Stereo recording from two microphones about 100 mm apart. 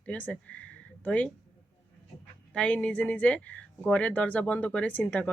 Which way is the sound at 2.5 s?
15° left (ahead or behind).